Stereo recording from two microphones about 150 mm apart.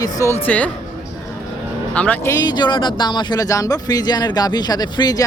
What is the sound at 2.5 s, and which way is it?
Speech, 30° left (ahead or behind).